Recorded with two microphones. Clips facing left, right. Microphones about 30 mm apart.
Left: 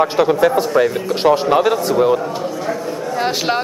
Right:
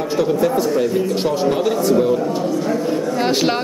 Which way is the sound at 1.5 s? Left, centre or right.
Left.